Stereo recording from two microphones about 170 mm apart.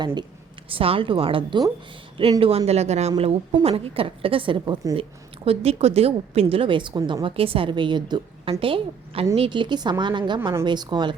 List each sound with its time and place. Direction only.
0.0 s a woman's voice: 25° right (ahead or behind)
5.5 s a woman's voice: 35° right (ahead or behind)